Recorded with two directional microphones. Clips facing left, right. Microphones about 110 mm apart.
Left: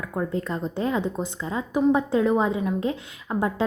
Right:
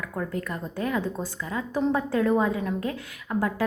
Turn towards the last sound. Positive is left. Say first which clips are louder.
# left 2 dB
turn(degrees=25)  # may be behind; listen again after turning